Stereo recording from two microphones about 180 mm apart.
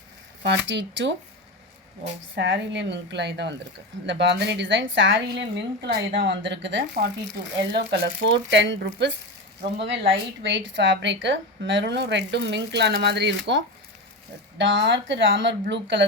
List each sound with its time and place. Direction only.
0.4 s a woman's voice: 80° right
2.3 s a woman's voice: 80° right
6.1 s a woman's voice: 85° right
14.6 s speech: 85° right